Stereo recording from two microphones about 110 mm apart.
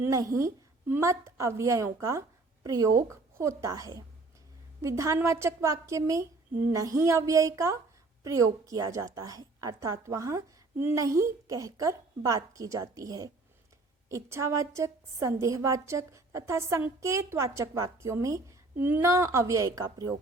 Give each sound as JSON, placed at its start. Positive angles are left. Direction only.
{"t": 0.0, "sound": "a woman's voice", "side_deg": -30}